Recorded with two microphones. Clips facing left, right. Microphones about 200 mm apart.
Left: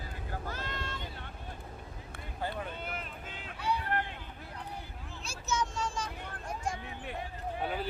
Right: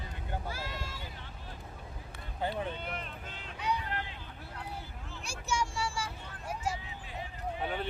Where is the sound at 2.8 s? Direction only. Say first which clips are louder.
Even; 5° left (ahead or behind).